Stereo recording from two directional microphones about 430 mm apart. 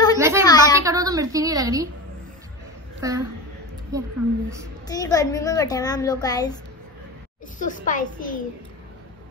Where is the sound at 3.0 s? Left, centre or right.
Centre.